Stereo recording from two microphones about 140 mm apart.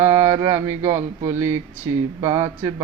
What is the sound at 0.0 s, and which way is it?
Speech, 20° right (ahead or behind).